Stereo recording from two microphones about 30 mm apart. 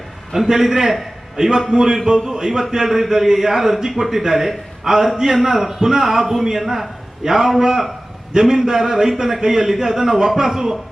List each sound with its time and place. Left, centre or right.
0.4 s a man's voice: centre
5.4 s a man's voice: centre